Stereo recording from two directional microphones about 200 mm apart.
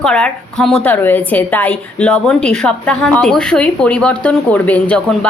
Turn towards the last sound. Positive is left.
turn(degrees=5)  # may be behind; listen again after turning